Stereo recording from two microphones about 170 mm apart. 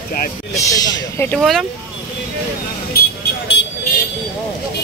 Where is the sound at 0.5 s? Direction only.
20° left (ahead or behind).